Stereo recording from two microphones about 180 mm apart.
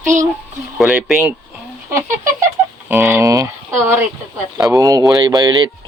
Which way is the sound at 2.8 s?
15° right (ahead or behind).